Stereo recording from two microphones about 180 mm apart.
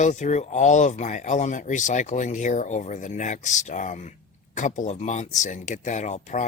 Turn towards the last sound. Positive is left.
turn(degrees=40)  # may be behind; listen again after turning